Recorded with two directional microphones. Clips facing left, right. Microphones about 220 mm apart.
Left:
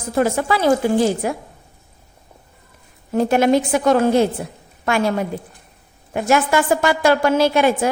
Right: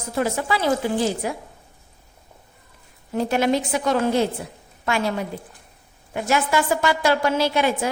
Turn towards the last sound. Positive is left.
turn(degrees=50)  # may be behind; listen again after turning